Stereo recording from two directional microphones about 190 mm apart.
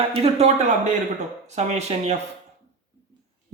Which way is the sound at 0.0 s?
30° right (ahead or behind).